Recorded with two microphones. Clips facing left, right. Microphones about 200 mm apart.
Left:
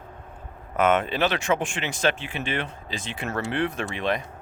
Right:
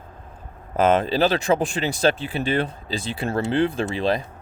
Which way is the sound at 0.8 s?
30° right (ahead or behind).